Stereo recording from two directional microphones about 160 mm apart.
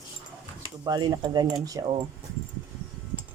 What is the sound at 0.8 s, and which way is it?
Speech, 25° right (ahead or behind).